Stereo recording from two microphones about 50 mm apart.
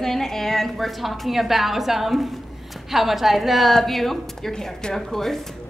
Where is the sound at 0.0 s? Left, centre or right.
Centre.